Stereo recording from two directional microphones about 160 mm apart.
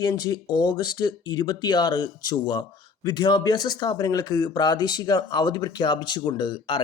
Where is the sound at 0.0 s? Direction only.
25° left (ahead or behind).